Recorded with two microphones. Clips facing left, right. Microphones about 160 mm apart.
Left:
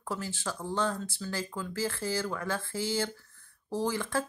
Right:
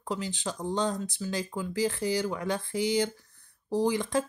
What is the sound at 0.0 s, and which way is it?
Speech, 15° right (ahead or behind).